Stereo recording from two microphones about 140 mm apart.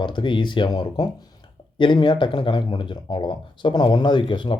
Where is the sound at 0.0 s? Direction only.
35° left (ahead or behind).